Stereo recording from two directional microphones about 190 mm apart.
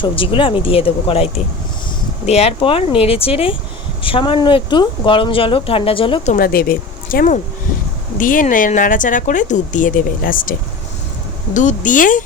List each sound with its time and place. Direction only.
0.0 s speech: 25° left (ahead or behind)
6.3 s speech: 50° left (ahead or behind)
11.5 s speech: 40° left (ahead or behind)